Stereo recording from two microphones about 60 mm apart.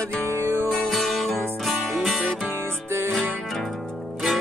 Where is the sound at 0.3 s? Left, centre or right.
Right.